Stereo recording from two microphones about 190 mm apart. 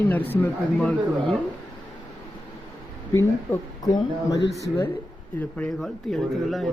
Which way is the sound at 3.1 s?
20° left (ahead or behind).